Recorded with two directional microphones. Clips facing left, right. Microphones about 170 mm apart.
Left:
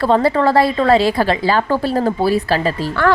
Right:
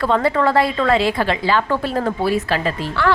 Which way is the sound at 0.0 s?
35° left (ahead or behind).